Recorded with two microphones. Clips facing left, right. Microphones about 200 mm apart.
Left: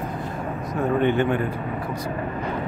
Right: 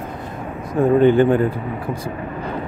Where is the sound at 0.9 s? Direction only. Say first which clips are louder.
Right 7 dB; 35° right (ahead or behind).